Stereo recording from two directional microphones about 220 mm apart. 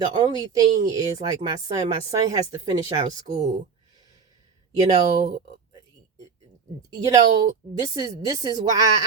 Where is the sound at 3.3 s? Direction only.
35° right (ahead or behind).